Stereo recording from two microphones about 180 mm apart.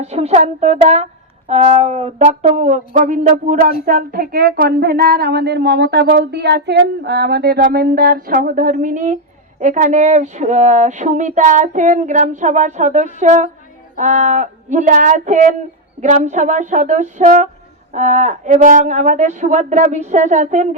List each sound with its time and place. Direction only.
0.0 s a woman's voice: 35° right (ahead or behind)